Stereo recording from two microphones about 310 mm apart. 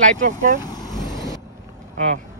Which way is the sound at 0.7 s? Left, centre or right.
Centre.